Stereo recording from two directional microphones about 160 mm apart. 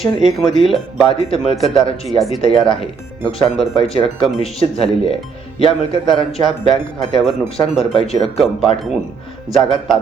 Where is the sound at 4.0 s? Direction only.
30° left (ahead or behind).